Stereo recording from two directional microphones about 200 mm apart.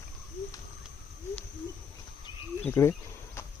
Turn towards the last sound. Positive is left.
turn(degrees=15)  # may be behind; listen again after turning